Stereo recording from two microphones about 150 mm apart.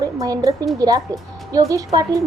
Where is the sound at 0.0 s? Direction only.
25° right (ahead or behind).